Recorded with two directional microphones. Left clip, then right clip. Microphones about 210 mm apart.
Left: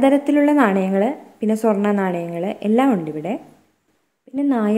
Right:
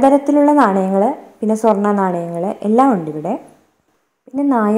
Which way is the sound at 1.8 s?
20° left (ahead or behind).